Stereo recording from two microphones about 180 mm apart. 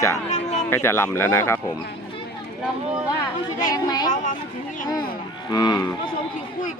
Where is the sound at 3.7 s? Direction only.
20° left (ahead or behind).